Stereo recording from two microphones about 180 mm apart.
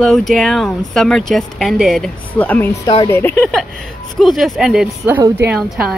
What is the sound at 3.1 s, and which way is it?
A woman's voice, 10° left (ahead or behind).